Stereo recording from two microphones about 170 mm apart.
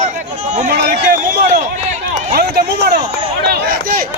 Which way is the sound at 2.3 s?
65° right (ahead or behind).